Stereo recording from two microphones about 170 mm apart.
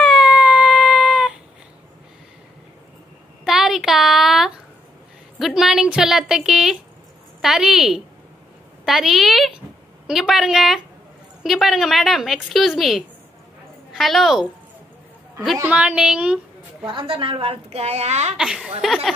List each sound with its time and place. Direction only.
0.0 s a sound: centre (ahead or behind)
3.4 s a sound: centre (ahead or behind)
5.4 s a woman's voice: centre (ahead or behind)
15.6 s a woman's voice: 10° right (ahead or behind)
16.8 s a woman's voice: 30° right (ahead or behind)
18.4 s a woman's voice: 5° right (ahead or behind)